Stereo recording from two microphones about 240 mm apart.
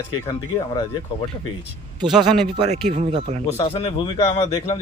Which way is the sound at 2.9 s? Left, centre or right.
Right.